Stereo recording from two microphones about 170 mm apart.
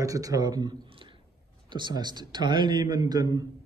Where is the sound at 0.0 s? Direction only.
20° right (ahead or behind).